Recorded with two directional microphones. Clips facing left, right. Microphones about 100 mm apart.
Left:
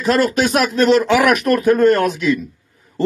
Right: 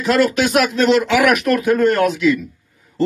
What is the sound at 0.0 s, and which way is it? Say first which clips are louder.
Speech: even; 40° left (ahead or behind).